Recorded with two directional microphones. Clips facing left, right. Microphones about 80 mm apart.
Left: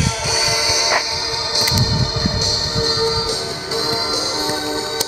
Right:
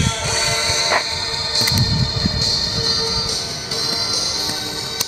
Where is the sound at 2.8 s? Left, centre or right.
Left.